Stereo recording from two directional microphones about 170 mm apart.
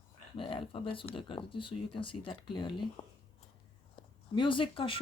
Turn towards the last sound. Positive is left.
turn(degrees=30)  # may be behind; listen again after turning